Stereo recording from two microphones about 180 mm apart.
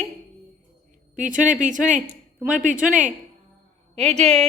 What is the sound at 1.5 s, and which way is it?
Speech, 45° right (ahead or behind).